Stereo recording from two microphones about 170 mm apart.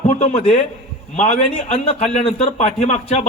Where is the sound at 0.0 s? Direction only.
40° left (ahead or behind).